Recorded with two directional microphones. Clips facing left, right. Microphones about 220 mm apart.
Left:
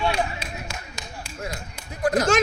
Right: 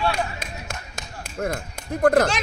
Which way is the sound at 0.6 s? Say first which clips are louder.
Even; 55° right (ahead or behind).